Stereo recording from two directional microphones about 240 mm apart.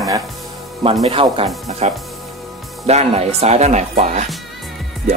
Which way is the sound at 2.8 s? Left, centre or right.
Right.